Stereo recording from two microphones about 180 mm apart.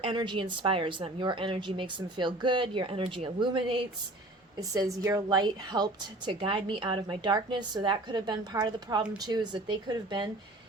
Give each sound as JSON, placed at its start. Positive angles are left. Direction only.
{"t": 0.0, "sound": "a woman's voice", "side_deg": -25}